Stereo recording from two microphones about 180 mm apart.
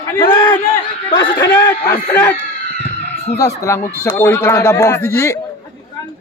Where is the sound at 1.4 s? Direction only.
10° left (ahead or behind).